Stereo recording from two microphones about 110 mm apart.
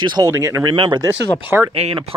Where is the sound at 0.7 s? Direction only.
40° right (ahead or behind).